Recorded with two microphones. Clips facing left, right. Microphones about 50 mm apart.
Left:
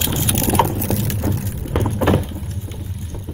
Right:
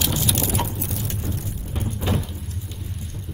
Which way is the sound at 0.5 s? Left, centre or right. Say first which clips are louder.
Left 9 dB; left.